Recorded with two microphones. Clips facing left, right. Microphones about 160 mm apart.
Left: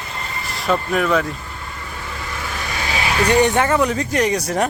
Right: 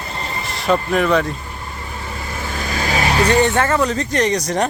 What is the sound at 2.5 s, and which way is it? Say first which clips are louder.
Vehicle: right 5 dB; 40° right (ahead or behind).